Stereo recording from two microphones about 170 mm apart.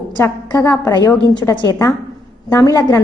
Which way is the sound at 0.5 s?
20° left (ahead or behind).